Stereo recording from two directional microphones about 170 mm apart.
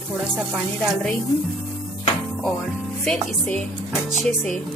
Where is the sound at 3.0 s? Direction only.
5° left (ahead or behind).